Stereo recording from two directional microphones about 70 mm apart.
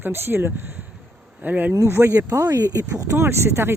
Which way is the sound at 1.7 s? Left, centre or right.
Right.